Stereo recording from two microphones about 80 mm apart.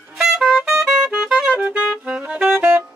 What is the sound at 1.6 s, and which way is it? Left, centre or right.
Saxophone, centre.